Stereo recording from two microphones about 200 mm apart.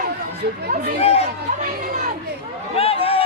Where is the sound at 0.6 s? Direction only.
45° right (ahead or behind).